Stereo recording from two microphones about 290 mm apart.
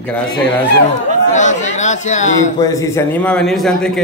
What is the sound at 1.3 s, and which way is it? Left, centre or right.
Speech, left.